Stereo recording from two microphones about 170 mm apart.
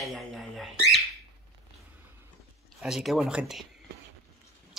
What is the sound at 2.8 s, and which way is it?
Speech, centre (ahead or behind).